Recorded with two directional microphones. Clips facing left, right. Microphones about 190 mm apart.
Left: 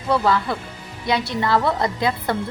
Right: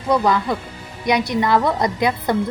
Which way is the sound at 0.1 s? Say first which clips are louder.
Right 2 dB; 15° right (ahead or behind).